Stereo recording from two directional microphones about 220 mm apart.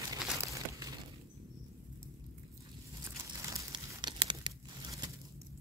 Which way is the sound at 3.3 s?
15° right (ahead or behind).